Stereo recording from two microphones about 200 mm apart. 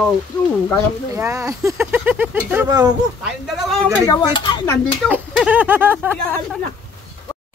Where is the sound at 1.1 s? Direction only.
15° right (ahead or behind).